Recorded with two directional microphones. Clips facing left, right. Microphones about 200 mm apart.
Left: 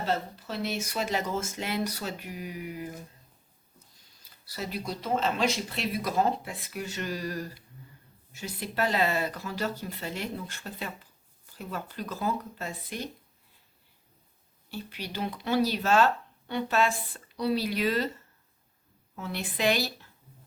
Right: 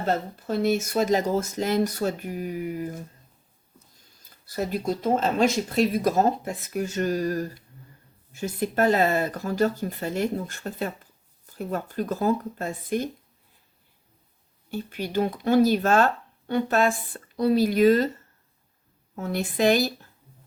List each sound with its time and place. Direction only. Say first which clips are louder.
0.0 s speech: right 4 dB; 50° right (ahead or behind)
4.2 s speech: right 8 dB; 50° right (ahead or behind)
14.7 s speech: right 8 dB; 50° right (ahead or behind)
19.1 s speech: right 7 dB; 45° right (ahead or behind)